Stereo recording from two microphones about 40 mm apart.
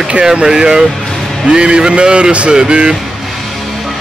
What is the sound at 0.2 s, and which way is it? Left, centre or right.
Speech, centre.